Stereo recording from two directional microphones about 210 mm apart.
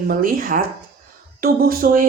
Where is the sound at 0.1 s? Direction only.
40° right (ahead or behind).